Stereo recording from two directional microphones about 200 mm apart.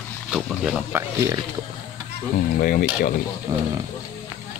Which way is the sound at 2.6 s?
45° left (ahead or behind).